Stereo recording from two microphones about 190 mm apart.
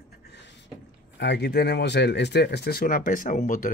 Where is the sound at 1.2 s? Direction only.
60° left (ahead or behind); by 3.7 s 45° left (ahead or behind).